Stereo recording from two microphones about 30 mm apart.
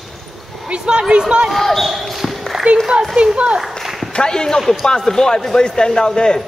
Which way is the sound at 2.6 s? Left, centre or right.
Right.